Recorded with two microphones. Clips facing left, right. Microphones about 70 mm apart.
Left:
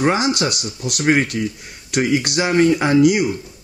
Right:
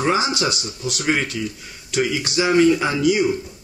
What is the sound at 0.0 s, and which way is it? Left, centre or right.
Speech, left.